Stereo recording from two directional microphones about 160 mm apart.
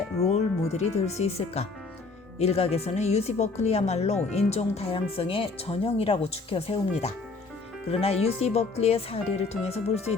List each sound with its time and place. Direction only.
0.3 s speech: 45° left (ahead or behind)